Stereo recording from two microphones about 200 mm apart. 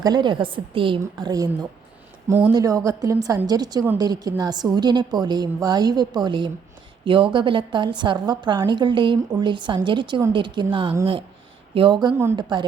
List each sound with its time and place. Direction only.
0.0 s a woman's voice: 20° right (ahead or behind)
2.5 s a woman's voice: 15° right (ahead or behind)